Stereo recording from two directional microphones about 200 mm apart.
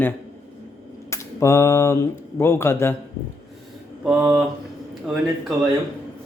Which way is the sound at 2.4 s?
10° left (ahead or behind).